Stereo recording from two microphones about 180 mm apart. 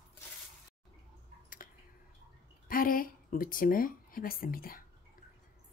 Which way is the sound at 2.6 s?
50° left (ahead or behind).